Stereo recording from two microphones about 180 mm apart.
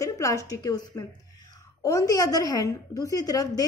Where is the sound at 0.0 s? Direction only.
20° left (ahead or behind).